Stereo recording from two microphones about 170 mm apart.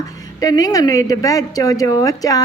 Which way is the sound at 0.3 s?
20° left (ahead or behind).